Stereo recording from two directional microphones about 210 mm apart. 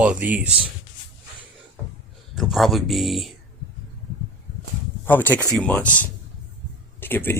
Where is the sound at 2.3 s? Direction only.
Centre (ahead or behind).